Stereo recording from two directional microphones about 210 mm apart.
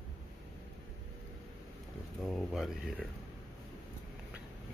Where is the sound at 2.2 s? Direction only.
Centre (ahead or behind).